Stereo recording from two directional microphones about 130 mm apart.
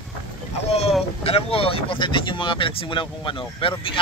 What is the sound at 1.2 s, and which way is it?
Speech, 50° left (ahead or behind).